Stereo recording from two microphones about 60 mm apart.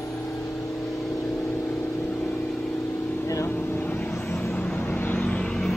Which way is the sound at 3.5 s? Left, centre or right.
Left.